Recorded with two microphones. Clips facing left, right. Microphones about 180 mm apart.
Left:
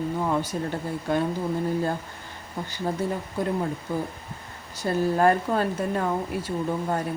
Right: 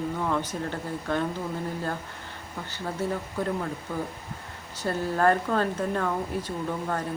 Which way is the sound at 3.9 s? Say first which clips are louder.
Left 3 dB; 10° left (ahead or behind).